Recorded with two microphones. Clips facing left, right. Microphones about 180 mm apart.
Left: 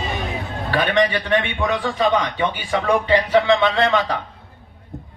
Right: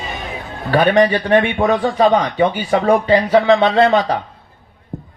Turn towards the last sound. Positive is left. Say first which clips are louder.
# right 5 dB
turn(degrees=-40)  # may be behind; listen again after turning